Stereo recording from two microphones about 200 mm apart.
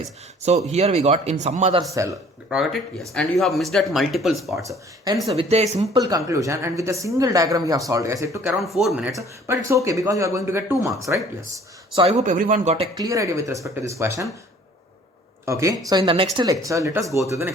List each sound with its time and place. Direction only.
0.0 s speech: 35° right (ahead or behind)
3.1 s speech: centre (ahead or behind)
4.5 s speech: 15° right (ahead or behind)
5.3 s speech: 30° right (ahead or behind)
6.0 s speech: 20° right (ahead or behind)
8.4 s speech: centre (ahead or behind)
9.1 s speech: 15° right (ahead or behind)
11.9 s speech: 35° right (ahead or behind); by 14.3 s 15° right (ahead or behind)
15.4 s speech: 15° right (ahead or behind)